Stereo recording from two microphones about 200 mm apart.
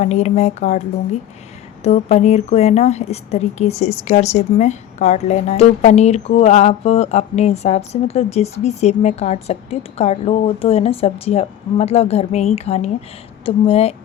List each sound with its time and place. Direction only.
0.0 s speech: 35° left (ahead or behind)
1.8 s speech: 35° left (ahead or behind)